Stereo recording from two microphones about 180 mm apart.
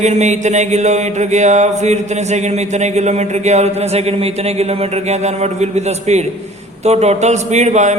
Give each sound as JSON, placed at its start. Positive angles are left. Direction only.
{"t": 0.0, "sound": "mantra", "side_deg": -40}